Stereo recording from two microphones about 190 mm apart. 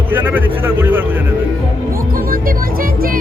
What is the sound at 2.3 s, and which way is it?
Speech, 50° right (ahead or behind).